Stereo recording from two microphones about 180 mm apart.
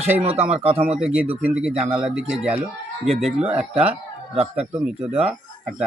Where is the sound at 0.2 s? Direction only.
35° right (ahead or behind).